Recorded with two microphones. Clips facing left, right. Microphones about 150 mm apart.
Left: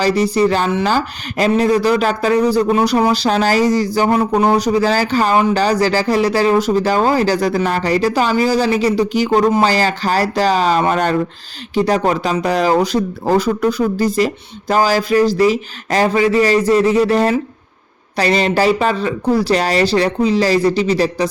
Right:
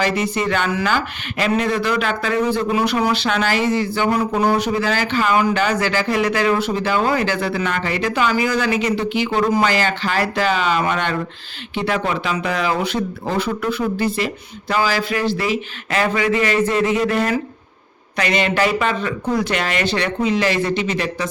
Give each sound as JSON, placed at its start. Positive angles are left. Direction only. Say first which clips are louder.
{"t": 0.0, "sound": "speech", "louder": "left 6 dB", "side_deg": 35}